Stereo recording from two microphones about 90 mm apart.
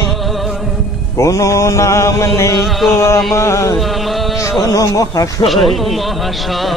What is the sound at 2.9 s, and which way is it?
Mantra, 35° left (ahead or behind).